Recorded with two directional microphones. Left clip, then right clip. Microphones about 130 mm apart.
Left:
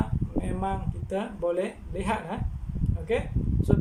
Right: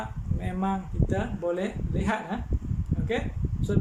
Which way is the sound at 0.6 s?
10° left (ahead or behind).